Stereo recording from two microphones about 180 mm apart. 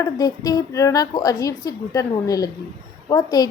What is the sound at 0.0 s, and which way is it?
A woman's voice, 20° left (ahead or behind).